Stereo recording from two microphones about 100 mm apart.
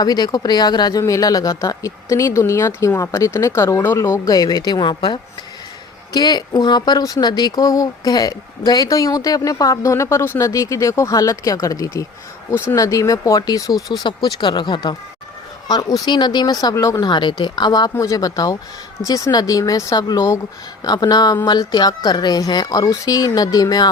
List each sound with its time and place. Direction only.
0.0 s speech: 40° left (ahead or behind)
13.7 s speech: centre (ahead or behind)
14.0 s speech: 45° left (ahead or behind)
17.0 s speech: 50° left (ahead or behind)
17.9 s speech: 30° left (ahead or behind)